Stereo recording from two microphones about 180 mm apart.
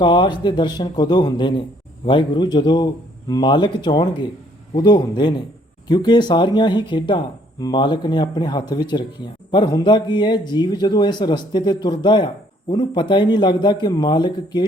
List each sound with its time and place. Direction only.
0.0 s speech: 25° left (ahead or behind)